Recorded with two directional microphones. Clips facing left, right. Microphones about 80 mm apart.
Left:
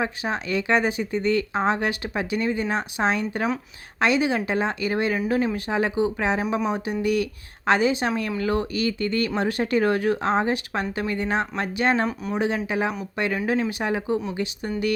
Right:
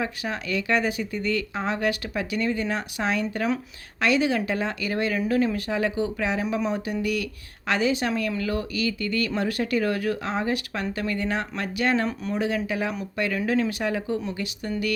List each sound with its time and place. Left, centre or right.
0.0 s speech: left